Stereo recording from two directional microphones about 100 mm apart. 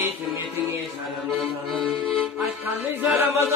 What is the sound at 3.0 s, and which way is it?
A capella, 20° right (ahead or behind).